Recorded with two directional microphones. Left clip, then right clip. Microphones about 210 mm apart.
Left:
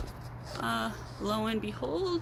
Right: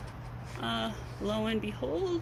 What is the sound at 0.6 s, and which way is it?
Speech, 15° left (ahead or behind).